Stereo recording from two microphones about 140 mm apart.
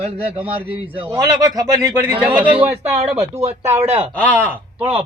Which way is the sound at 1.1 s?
25° right (ahead or behind).